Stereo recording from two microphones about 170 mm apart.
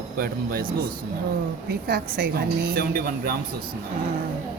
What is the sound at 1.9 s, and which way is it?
A woman's voice, 65° right (ahead or behind).